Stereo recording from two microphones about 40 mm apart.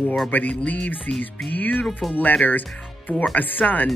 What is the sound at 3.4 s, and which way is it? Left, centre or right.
Speech, left.